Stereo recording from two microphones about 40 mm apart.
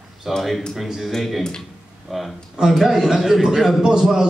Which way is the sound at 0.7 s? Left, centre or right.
Centre.